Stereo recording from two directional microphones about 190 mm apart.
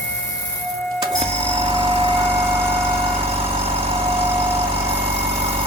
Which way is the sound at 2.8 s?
30° right (ahead or behind).